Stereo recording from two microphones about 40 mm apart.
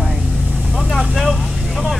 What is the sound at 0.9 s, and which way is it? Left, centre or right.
Vehicle, centre.